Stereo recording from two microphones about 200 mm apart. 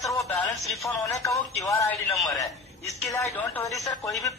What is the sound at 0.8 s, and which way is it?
A woman's voice, 10° left (ahead or behind).